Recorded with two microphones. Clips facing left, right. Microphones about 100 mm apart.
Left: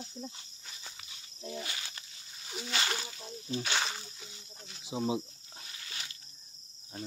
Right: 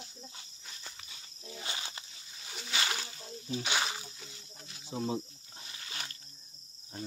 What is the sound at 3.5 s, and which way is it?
Speech, 15° right (ahead or behind).